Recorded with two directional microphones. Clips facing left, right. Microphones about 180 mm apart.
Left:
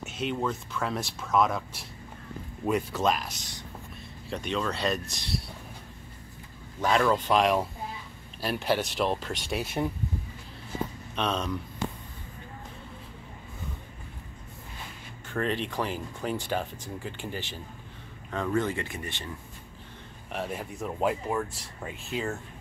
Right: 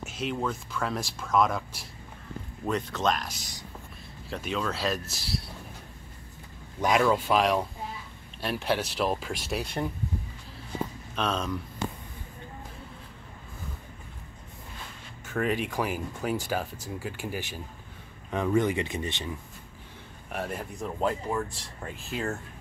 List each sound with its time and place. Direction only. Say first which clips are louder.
0.2 s speech: left 1 dB; centre (ahead or behind)
7.0 s speech: even; 5° right (ahead or behind)
11.1 s speech: even; centre (ahead or behind)
15.2 s speech: right 1 dB; 5° right (ahead or behind)
20.2 s speech: even; centre (ahead or behind)